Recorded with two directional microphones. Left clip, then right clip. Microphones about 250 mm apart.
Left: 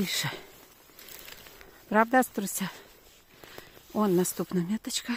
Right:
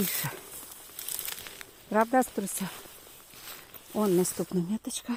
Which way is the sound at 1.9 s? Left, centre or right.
Left.